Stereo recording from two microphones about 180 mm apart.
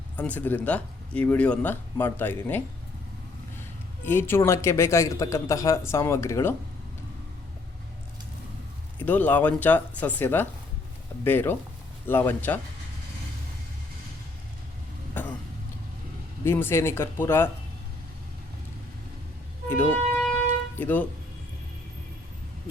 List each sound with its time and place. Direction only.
0.2 s speech: 10° left (ahead or behind)
3.6 s a man's voice: 10° left (ahead or behind)
9.0 s speech: 10° left (ahead or behind)
15.2 s a sound: 10° left (ahead or behind)
16.4 s speech: 15° left (ahead or behind)
19.6 s vehicle: 15° left (ahead or behind)
20.7 s speech: 10° left (ahead or behind)